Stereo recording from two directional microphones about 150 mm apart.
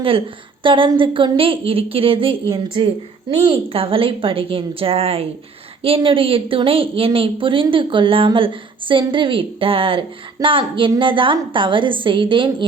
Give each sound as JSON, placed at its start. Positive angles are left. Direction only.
{"t": 0.6, "sound": "a woman's voice", "side_deg": -35}